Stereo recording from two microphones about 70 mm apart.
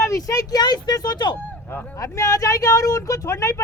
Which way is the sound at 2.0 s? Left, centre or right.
Left.